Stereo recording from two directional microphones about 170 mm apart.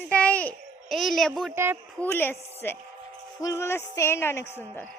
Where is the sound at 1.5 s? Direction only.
15° right (ahead or behind).